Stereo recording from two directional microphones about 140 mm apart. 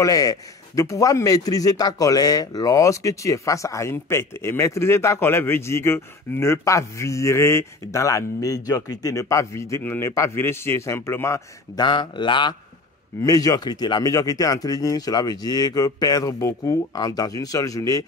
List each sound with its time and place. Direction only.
0.0 s a man's voice: 25° left (ahead or behind)
11.8 s a man's voice: 35° left (ahead or behind)